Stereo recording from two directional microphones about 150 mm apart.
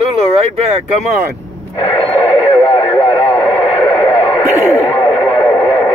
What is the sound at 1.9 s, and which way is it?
Radio, 15° left (ahead or behind).